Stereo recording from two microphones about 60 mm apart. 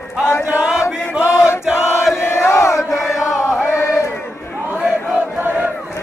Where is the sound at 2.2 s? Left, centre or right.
Left.